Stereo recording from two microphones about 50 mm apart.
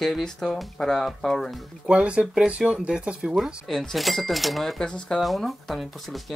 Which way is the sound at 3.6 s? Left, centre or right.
Centre.